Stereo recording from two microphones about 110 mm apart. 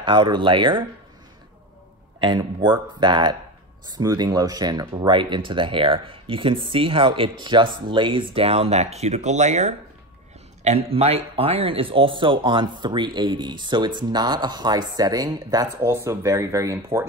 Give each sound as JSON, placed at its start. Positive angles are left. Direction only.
{"t": 0.0, "sound": "speech", "side_deg": -45}
{"t": 2.1, "sound": "speech", "side_deg": -45}
{"t": 3.8, "sound": "speech", "side_deg": -35}
{"t": 10.6, "sound": "speech", "side_deg": -70}